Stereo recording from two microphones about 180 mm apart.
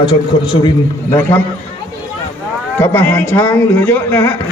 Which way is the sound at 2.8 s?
10° left (ahead or behind).